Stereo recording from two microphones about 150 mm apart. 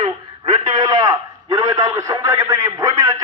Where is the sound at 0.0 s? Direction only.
30° right (ahead or behind).